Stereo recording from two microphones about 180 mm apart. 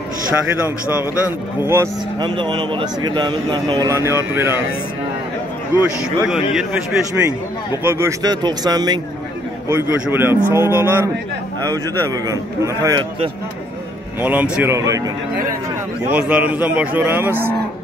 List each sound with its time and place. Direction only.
1.6 s a man's voice: 15° right (ahead or behind)
2.1 s speech: 25° right (ahead or behind)
5.8 s speech: 5° right (ahead or behind)
7.8 s a man's voice: 15° right (ahead or behind)
14.2 s a man's voice: 10° right (ahead or behind)
16.1 s a man's voice: 10° right (ahead or behind)